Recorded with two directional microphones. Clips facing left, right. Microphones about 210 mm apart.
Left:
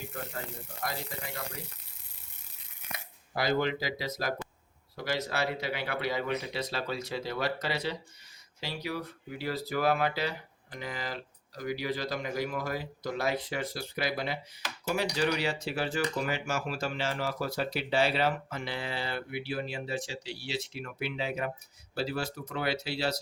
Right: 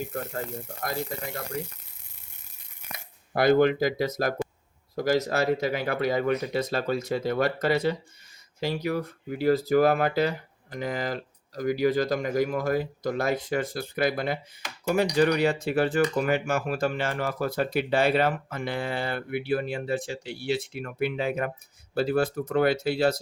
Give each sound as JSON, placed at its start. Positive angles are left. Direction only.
{"t": 0.1, "sound": "speech", "side_deg": -50}
{"t": 3.3, "sound": "speech", "side_deg": -55}